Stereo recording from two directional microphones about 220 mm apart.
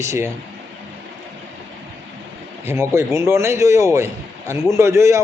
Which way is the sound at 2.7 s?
10° right (ahead or behind).